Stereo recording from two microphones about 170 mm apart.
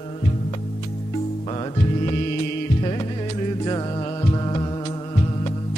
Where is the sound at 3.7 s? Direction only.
25° left (ahead or behind).